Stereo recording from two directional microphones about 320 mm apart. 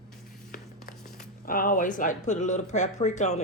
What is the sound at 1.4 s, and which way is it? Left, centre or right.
Speech, left.